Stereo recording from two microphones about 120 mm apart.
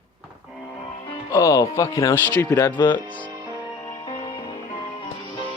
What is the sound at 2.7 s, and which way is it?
Speech, 40° left (ahead or behind).